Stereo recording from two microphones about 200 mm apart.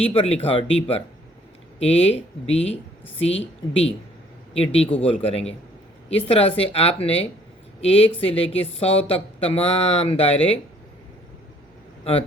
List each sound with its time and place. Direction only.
0.0 s a man's voice: 30° left (ahead or behind)